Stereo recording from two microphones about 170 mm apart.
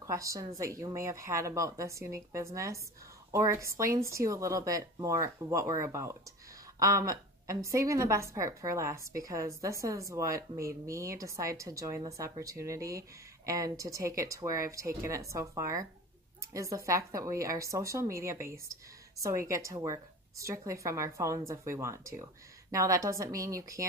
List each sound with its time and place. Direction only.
0.0 s speech: 20° right (ahead or behind)